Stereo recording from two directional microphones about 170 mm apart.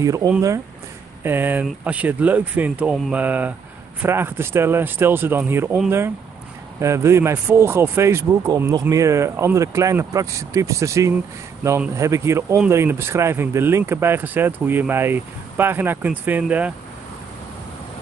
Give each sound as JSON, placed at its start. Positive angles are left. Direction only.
{"t": 0.0, "sound": "speech", "side_deg": -20}